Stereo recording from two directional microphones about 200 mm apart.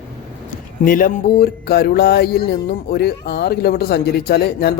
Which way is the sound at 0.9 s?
45° left (ahead or behind).